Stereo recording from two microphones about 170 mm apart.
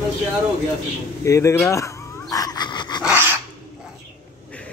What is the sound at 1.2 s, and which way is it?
Dog, 15° left (ahead or behind).